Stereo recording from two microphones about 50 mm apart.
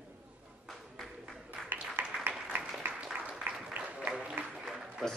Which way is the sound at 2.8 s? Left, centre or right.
Right.